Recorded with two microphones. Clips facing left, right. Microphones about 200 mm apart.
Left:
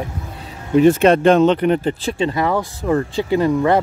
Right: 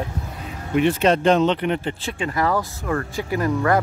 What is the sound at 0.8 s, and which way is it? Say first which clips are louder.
Speech: left 6 dB; 45° left (ahead or behind).